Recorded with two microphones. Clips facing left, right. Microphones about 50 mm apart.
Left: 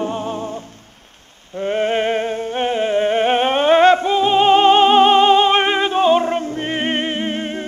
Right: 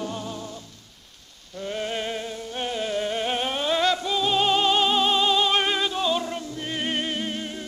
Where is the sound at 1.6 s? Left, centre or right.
Left.